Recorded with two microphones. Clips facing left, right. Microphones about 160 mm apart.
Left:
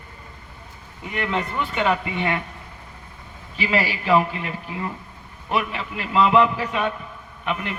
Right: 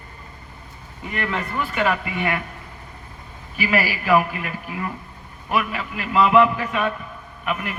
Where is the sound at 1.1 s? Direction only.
20° left (ahead or behind).